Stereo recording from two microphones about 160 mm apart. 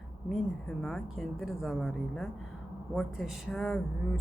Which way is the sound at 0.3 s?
5° left (ahead or behind).